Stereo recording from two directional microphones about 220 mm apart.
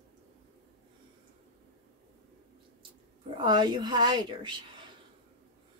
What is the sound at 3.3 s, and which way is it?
A woman's voice, 20° right (ahead or behind).